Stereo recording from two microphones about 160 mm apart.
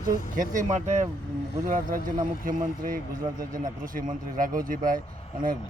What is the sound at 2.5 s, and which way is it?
Speech, 60° right (ahead or behind).